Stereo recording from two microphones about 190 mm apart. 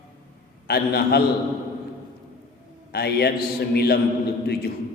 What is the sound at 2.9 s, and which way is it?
A man's voice, 60° left (ahead or behind).